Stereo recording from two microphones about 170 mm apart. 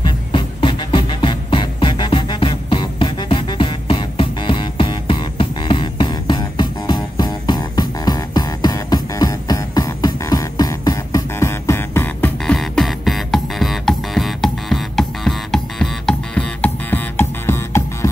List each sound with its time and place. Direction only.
0.0 s music: 30° left (ahead or behind); by 17.8 s 15° left (ahead or behind)